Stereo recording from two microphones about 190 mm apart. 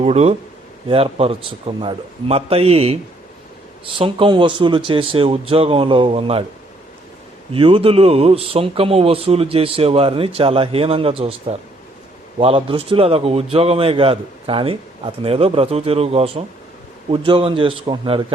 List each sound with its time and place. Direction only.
0.0 s a man's voice: 35° right (ahead or behind)
7.5 s a man's voice: 30° right (ahead or behind)